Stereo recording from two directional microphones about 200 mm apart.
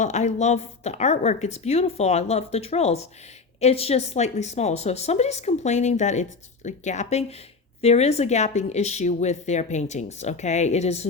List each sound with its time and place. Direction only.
0.0 s speech: 35° left (ahead or behind)